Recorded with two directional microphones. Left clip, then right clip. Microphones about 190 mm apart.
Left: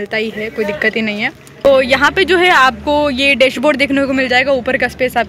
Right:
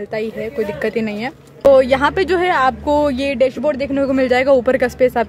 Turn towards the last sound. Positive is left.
turn(degrees=-15)  # may be behind; listen again after turning